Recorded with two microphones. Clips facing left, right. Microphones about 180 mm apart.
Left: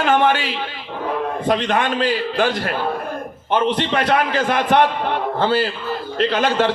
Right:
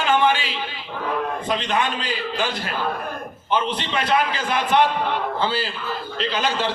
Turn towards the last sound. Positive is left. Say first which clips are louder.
# left 6 dB
turn(degrees=60)  # may be behind; listen again after turning